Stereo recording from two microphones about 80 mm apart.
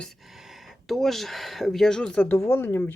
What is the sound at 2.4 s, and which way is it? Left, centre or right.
Speech, left.